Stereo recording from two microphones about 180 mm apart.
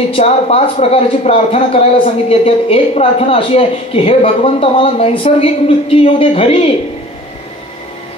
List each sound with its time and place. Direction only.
0.1 s speech: 35° left (ahead or behind)